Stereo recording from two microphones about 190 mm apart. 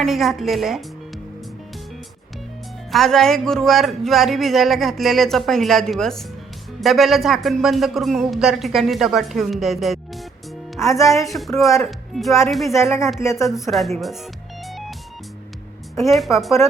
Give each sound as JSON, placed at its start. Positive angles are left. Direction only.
{"t": 0.0, "sound": "speech", "side_deg": 0}
{"t": 2.9, "sound": "speech", "side_deg": 0}
{"t": 10.8, "sound": "speech", "side_deg": 15}
{"t": 11.3, "sound": "speech", "side_deg": 0}
{"t": 13.1, "sound": "speech", "side_deg": 15}
{"t": 13.7, "sound": "speech", "side_deg": 0}
{"t": 14.7, "sound": "music", "side_deg": 0}
{"t": 16.0, "sound": "speech", "side_deg": 0}